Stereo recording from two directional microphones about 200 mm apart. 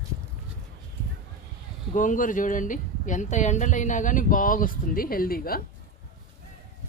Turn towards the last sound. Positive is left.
turn(degrees=45)  # may be behind; listen again after turning